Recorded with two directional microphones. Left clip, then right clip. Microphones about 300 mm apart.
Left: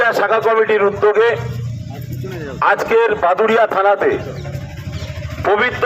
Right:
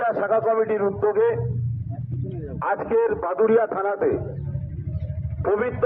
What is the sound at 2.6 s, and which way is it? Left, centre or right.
A man's voice, left.